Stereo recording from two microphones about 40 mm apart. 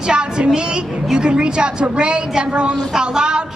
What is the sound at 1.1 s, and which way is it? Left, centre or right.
A woman's voice, right.